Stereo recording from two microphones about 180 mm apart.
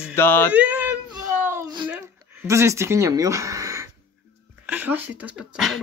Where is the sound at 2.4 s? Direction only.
15° right (ahead or behind).